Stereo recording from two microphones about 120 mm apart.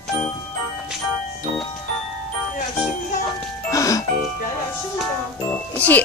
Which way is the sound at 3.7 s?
25° left (ahead or behind).